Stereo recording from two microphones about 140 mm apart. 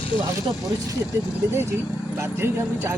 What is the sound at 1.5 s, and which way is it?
A woman's voice, 20° right (ahead or behind).